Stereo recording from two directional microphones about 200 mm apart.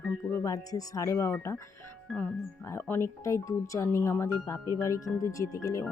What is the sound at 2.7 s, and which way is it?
Speech, 10° left (ahead or behind).